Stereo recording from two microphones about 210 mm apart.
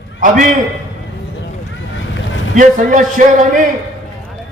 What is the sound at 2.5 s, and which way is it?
A man's voice, 40° right (ahead or behind).